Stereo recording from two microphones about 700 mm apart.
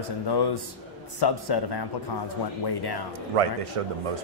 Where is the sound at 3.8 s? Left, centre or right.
Right.